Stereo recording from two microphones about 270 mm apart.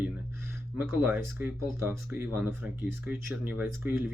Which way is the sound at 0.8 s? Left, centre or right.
Centre.